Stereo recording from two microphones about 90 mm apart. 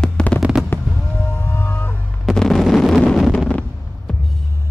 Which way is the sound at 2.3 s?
5° left (ahead or behind).